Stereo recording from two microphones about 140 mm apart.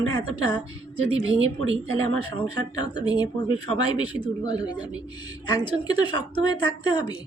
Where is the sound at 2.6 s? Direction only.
30° left (ahead or behind).